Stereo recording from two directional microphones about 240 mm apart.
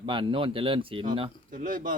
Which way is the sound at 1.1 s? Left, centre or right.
Right.